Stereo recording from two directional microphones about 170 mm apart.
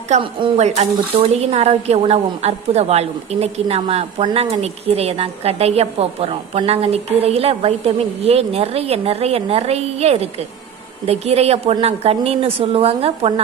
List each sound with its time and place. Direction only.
0.1 s speech: 30° right (ahead or behind)